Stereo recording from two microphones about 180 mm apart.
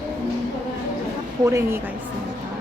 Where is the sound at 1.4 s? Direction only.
15° right (ahead or behind).